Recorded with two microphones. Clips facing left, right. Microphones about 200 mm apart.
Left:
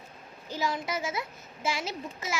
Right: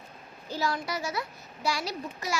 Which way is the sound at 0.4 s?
15° left (ahead or behind).